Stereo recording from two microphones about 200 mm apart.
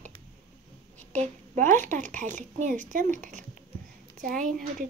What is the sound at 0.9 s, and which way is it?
A woman's voice, 40° right (ahead or behind).